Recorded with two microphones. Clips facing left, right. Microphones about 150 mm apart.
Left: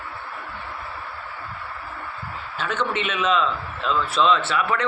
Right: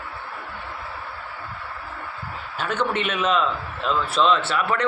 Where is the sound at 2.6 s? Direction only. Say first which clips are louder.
Right 1 dB; 5° right (ahead or behind).